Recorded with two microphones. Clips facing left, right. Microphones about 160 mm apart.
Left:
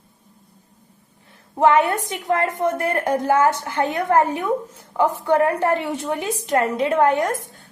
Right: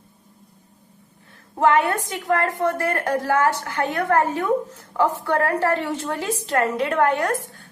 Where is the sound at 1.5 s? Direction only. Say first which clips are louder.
Left 2 dB; 20° left (ahead or behind).